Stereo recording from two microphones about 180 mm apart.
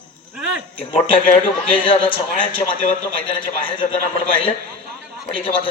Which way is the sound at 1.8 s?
30° left (ahead or behind).